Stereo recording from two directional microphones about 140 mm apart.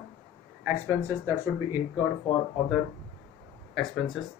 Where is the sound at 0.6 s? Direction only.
15° right (ahead or behind).